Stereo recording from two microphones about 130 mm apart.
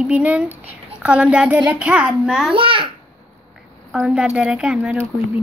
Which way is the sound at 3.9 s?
5° right (ahead or behind).